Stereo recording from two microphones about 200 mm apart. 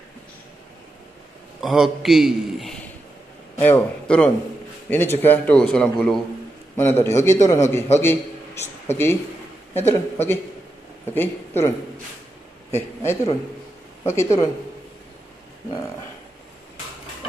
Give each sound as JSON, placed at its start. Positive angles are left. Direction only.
{"t": 1.6, "sound": "a man's voice", "side_deg": 0}
{"t": 12.7, "sound": "a man's voice", "side_deg": 10}